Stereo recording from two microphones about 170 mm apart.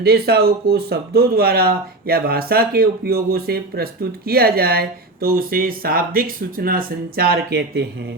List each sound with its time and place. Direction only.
0.0 s speech: 65° right (ahead or behind)